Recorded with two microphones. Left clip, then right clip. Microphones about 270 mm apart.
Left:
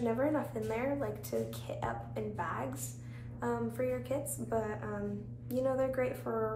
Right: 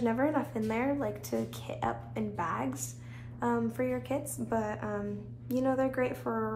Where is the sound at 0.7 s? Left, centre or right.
Right.